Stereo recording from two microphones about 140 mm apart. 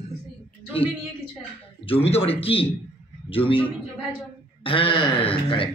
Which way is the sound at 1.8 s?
45° left (ahead or behind).